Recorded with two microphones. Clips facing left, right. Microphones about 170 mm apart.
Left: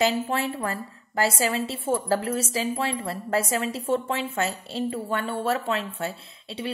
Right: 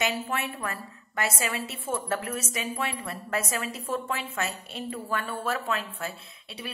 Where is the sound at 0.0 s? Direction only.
30° left (ahead or behind).